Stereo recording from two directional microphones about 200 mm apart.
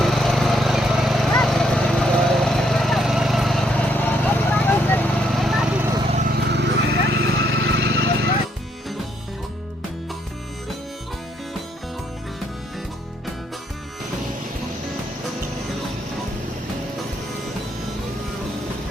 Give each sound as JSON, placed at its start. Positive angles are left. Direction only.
{"t": 0.0, "sound": "lawn mower", "side_deg": 0}
{"t": 4.5, "sound": "vehicle", "side_deg": 10}
{"t": 6.1, "sound": "vehicle", "side_deg": -35}
{"t": 6.3, "sound": "vehicle", "side_deg": -60}
{"t": 7.6, "sound": "vehicle", "side_deg": -55}